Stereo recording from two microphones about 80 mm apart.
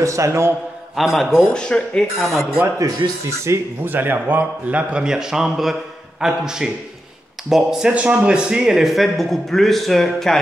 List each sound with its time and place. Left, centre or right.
0.0 s a man's voice: right
0.9 s speech: centre
2.1 s speech: centre
3.3 s a man's voice: right
3.8 s a man's voice: right; by 7.9 s centre
7.9 s speech: centre